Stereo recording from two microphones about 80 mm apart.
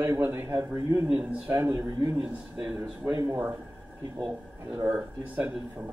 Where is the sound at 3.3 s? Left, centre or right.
Right.